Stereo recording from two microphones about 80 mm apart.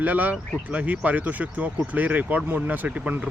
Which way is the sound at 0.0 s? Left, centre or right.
Centre.